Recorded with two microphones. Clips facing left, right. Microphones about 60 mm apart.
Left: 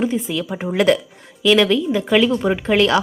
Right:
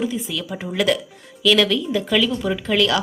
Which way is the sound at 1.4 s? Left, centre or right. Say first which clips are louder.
Left 3 dB; left.